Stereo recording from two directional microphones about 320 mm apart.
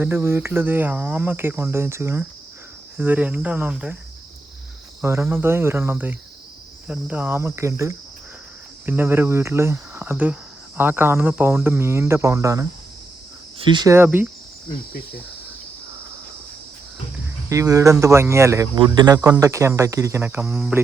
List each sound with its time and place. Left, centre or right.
0.0 s speech: centre
3.0 s cricket: centre
5.0 s speech: centre
17.5 s speech: centre